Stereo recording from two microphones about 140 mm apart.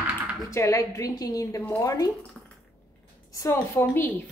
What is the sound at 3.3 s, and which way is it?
Speech, 20° left (ahead or behind).